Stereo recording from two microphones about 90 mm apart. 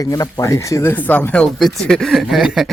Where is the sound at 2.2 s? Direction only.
10° right (ahead or behind).